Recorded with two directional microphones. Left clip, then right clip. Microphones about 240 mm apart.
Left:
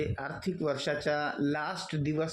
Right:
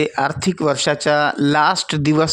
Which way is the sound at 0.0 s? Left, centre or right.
Right.